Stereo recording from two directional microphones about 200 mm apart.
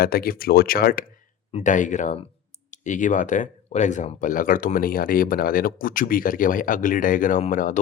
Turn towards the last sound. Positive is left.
turn(degrees=40)  # may be behind; listen again after turning